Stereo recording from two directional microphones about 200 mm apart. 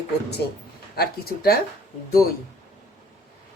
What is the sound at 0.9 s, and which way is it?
Speech, 50° left (ahead or behind).